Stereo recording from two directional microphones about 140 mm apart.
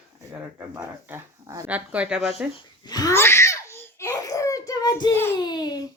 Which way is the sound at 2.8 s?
25° left (ahead or behind).